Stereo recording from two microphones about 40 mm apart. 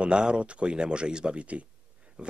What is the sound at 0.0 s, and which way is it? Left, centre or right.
Speech, right.